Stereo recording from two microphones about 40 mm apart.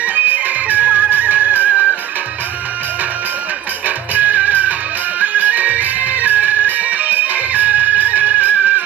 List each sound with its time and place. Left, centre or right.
0.0 s music: right
3.8 s music: right